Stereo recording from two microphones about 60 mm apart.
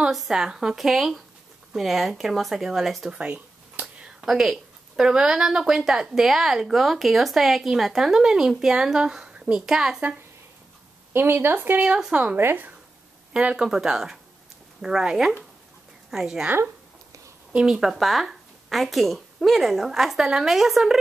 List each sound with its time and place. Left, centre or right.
0.1 s speech: centre
3.2 s a sound: right
3.8 s a woman's voice: centre
11.1 s speech: right
11.8 s speech: centre
12.4 s speech: right
13.3 s a woman's voice: centre
16.4 s speech: right
17.6 s a woman's voice: centre